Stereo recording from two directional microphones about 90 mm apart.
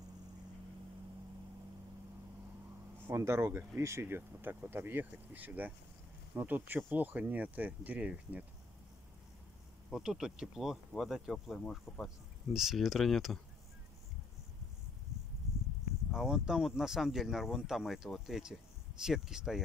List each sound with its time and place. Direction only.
3.1 s speech: 30° right (ahead or behind); by 8.5 s 15° right (ahead or behind)
9.8 s speech: 5° right (ahead or behind)
16.1 s speech: 5° right (ahead or behind)